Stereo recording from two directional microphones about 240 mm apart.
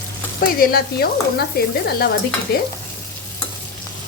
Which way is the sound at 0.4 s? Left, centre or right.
Left.